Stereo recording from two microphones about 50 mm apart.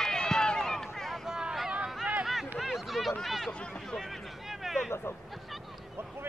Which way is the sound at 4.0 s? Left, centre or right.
Centre.